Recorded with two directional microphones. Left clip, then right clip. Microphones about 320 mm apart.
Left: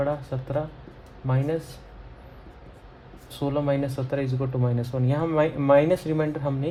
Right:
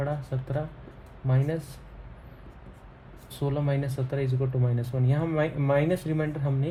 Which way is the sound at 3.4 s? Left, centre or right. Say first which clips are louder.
Left 5 dB; centre.